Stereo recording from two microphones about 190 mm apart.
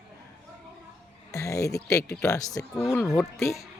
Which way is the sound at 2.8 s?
Centre (ahead or behind).